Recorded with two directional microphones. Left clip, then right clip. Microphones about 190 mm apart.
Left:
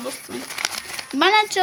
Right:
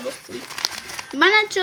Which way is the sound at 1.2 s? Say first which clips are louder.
Even; 5° left (ahead or behind).